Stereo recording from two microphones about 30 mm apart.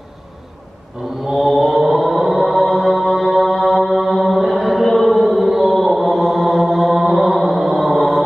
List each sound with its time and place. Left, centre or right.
1.3 s mantra: centre
5.5 s chant: centre
5.8 s mantra: centre
7.6 s a sound: centre